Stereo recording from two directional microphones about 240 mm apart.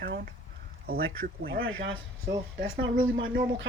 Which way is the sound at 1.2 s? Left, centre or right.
Right.